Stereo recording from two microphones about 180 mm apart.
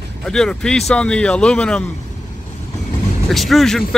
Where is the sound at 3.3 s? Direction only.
Centre (ahead or behind).